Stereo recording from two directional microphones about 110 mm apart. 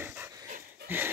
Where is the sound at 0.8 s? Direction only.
15° right (ahead or behind).